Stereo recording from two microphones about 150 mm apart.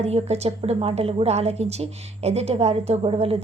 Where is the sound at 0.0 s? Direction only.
45° right (ahead or behind).